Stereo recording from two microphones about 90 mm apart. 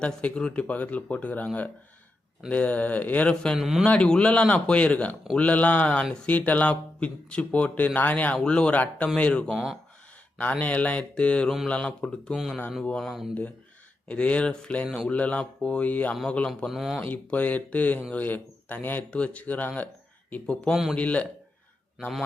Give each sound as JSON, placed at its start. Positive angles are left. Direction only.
{"t": 0.0, "sound": "speech", "side_deg": 15}
{"t": 2.5, "sound": "speech", "side_deg": 15}
{"t": 3.6, "sound": "speech", "side_deg": -5}
{"t": 3.8, "sound": "speech", "side_deg": 10}
{"t": 9.5, "sound": "speech", "side_deg": -5}
{"t": 10.6, "sound": "speech", "side_deg": 15}
{"t": 13.0, "sound": "speech", "side_deg": 0}
{"t": 14.1, "sound": "speech", "side_deg": 15}
{"t": 16.6, "sound": "speech", "side_deg": 0}
{"t": 17.0, "sound": "speech", "side_deg": 15}